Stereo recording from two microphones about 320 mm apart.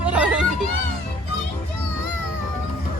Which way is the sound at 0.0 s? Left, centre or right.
Centre.